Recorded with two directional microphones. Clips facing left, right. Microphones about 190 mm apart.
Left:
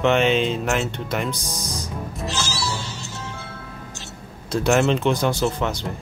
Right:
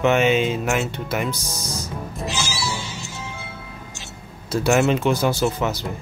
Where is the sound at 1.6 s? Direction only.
15° left (ahead or behind).